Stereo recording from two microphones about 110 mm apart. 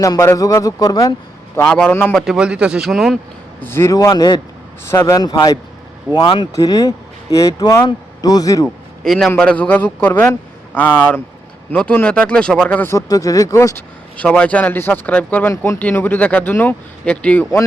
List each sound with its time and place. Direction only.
0.0 s speech: 30° left (ahead or behind)
1.6 s speech: 5° left (ahead or behind)
1.9 s speech: 20° left (ahead or behind)
2.1 s speech: 5° right (ahead or behind)
3.6 s speech: 20° left (ahead or behind)
3.9 s speech: 35° left (ahead or behind)
4.9 s speech: 25° left (ahead or behind)
5.1 s speech: 35° left (ahead or behind)
6.5 s speech: 30° left (ahead or behind)
8.6 s a man's voice: 5° left (ahead or behind); by 13.1 s 20° left (ahead or behind)
13.1 s speech: 35° left (ahead or behind)
14.2 s speech: 10° left (ahead or behind)
15.4 s speech: 25° left (ahead or behind)
15.8 s speech: 15° left (ahead or behind)